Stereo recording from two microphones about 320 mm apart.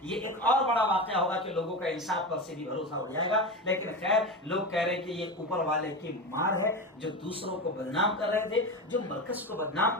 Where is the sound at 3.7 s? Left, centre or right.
Centre.